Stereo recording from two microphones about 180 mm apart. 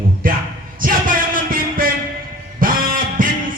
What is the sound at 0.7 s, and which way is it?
Music, 50° right (ahead or behind).